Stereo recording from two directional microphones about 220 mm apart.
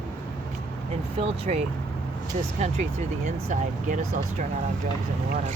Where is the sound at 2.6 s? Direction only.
30° right (ahead or behind).